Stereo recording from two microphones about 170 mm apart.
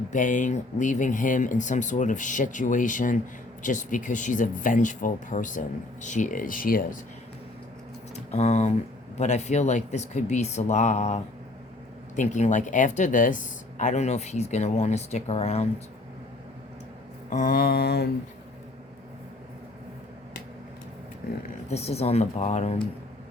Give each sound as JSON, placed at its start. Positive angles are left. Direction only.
{"t": 0.1, "sound": "speech", "side_deg": 50}
{"t": 8.1, "sound": "speech", "side_deg": 40}
{"t": 17.2, "sound": "a sound", "side_deg": 50}
{"t": 21.2, "sound": "speech", "side_deg": 70}
{"t": 21.7, "sound": "speech", "side_deg": 35}